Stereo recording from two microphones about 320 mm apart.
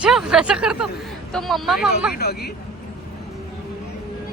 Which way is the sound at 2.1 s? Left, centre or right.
Left.